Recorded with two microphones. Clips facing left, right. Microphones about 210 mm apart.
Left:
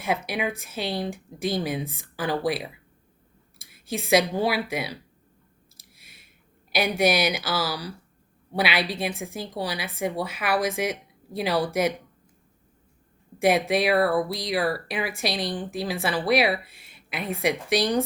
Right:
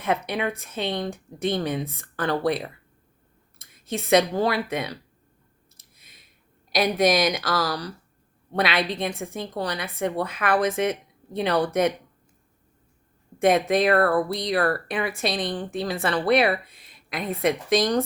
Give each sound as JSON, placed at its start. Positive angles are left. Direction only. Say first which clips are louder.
{"t": 0.1, "sound": "speech", "louder": "right 2 dB", "side_deg": 5}
{"t": 5.9, "sound": "a sound", "louder": "left 1 dB", "side_deg": 85}
{"t": 6.7, "sound": "a woman's voice", "louder": "right 2 dB", "side_deg": 5}
{"t": 13.4, "sound": "a woman's voice", "louder": "right 2 dB", "side_deg": 5}